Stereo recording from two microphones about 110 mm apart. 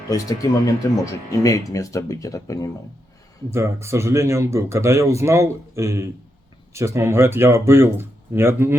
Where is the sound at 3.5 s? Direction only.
25° right (ahead or behind).